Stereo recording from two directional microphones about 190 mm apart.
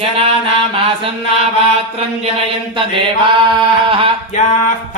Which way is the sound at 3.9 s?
25° right (ahead or behind).